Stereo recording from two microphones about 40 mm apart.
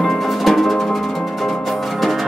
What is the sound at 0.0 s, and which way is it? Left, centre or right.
Music, centre.